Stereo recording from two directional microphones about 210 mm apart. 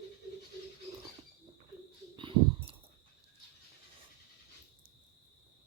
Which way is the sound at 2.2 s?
25° right (ahead or behind).